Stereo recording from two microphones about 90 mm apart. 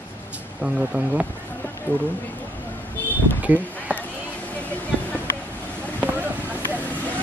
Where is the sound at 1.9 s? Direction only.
20° left (ahead or behind).